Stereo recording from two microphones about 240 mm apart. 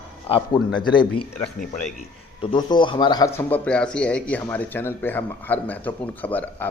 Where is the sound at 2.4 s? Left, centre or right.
Centre.